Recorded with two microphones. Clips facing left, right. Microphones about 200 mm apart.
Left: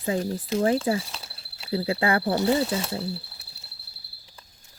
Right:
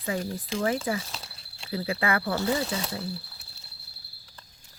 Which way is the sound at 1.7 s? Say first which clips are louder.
Left 4 dB; 30° left (ahead or behind).